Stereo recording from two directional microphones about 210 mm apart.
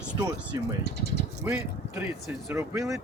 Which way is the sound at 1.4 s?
5° right (ahead or behind).